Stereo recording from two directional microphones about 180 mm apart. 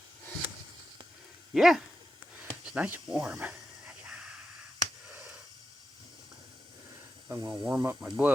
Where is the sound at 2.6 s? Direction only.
5° right (ahead or behind).